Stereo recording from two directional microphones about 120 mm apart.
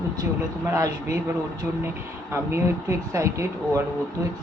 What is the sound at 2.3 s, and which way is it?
Speech, 25° right (ahead or behind).